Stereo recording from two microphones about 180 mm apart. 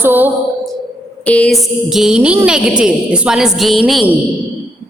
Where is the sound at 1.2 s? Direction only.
5° left (ahead or behind).